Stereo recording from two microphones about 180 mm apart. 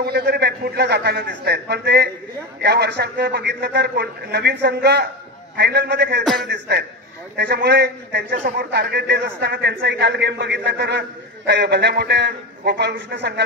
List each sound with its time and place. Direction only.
0.0 s a man's voice: 65° right (ahead or behind)